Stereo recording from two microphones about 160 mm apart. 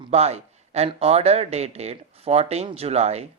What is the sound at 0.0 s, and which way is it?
A man's voice, 40° right (ahead or behind).